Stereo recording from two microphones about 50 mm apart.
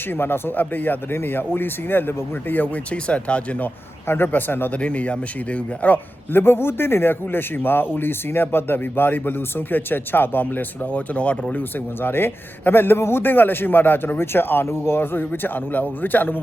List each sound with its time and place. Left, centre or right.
0.1 s speech: left
2.9 s speech: left
4.0 s a man's voice: left
4.3 s speech: left
4.7 s speech: left
6.3 s speech: left
12.0 s speech: left
13.3 s speech: left